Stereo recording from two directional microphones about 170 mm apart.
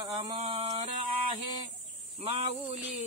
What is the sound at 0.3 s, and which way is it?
Music, 35° right (ahead or behind).